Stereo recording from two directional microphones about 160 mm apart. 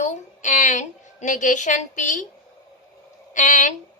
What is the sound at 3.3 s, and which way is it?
Speech, 50° left (ahead or behind).